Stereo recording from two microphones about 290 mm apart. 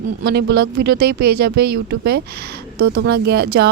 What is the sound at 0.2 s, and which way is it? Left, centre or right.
A woman's voice, right.